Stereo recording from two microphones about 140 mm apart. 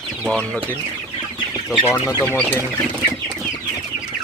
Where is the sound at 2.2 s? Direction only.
10° left (ahead or behind).